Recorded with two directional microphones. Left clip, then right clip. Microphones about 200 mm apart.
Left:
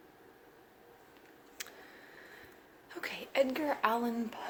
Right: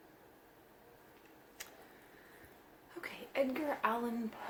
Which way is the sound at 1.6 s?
45° left (ahead or behind).